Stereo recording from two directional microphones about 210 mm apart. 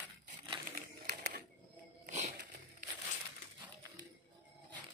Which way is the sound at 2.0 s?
35° right (ahead or behind).